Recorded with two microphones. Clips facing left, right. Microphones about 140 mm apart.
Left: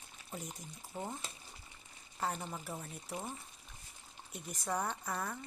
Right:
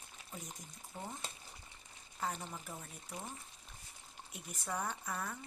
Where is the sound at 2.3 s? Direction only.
5° left (ahead or behind).